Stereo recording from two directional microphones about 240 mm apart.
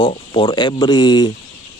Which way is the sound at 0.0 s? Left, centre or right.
Left.